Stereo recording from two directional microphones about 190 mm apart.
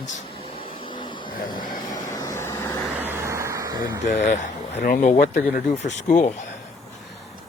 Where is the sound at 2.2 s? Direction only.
15° left (ahead or behind).